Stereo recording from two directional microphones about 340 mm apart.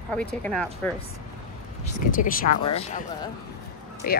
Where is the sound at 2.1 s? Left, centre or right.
Left.